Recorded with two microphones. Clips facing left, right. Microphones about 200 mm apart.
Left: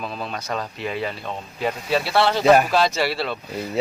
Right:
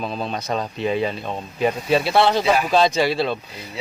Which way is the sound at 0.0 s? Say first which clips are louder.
Right 4 dB; 20° right (ahead or behind).